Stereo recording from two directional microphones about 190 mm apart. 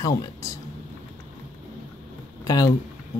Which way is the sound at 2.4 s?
20° left (ahead or behind).